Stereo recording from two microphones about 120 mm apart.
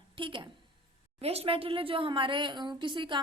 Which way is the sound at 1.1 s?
60° right (ahead or behind).